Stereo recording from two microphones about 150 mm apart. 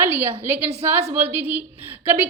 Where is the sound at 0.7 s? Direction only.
40° right (ahead or behind).